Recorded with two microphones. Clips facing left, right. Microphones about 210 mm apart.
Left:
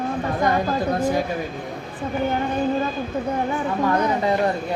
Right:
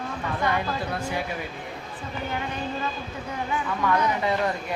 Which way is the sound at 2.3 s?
40° left (ahead or behind).